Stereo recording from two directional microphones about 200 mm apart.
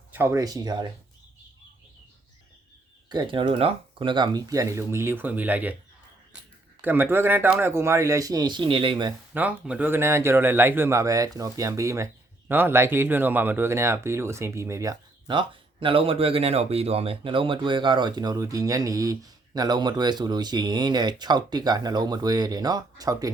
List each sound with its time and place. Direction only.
0.1 s a man's voice: 10° right (ahead or behind)
3.1 s speech: 25° right (ahead or behind)
6.8 s speech: 10° right (ahead or behind)
9.3 s a man's voice: 10° right (ahead or behind)